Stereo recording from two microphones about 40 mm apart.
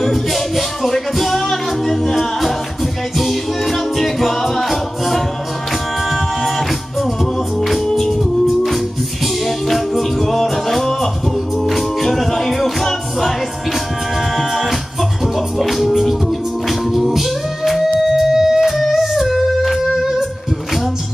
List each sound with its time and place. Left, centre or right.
0.0 s music: centre
7.5 s music: centre
14.3 s music: centre